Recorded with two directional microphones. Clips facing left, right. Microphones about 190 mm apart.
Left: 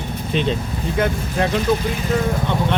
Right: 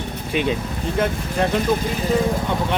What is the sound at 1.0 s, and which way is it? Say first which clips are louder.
Speech: left 1 dB; centre (ahead or behind).